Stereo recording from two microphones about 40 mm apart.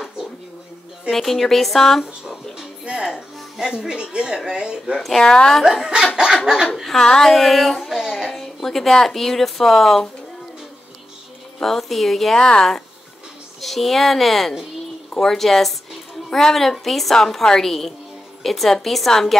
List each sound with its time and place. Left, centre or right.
1.1 s a woman's voice: centre
2.8 s music: right
3.1 s speech: centre
5.2 s a woman's voice: centre
5.6 s dog: centre
7.0 s speech: centre
7.3 s a woman's voice: centre
7.9 s a sound: centre
8.3 s speech: centre
11.6 s a woman's voice: centre
12.4 s speech: centre
13.6 s a woman's voice: centre